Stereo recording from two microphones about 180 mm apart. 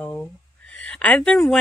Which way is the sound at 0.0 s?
Centre (ahead or behind).